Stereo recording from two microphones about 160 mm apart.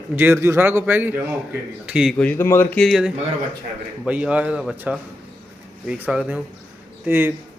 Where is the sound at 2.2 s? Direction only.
10° left (ahead or behind).